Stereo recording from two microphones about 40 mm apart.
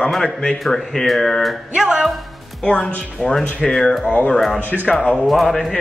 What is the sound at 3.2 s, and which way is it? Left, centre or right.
Speech, centre.